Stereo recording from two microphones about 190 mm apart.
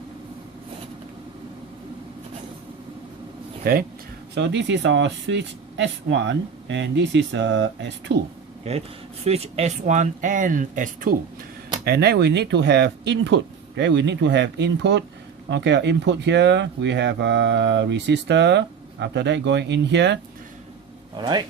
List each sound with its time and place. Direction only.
3.6 s speech: 50° right (ahead or behind)
4.4 s speech: 65° right (ahead or behind)
8.7 s speech: 35° right (ahead or behind)
11.9 s speech: 55° right (ahead or behind)
21.2 s speech: 20° right (ahead or behind)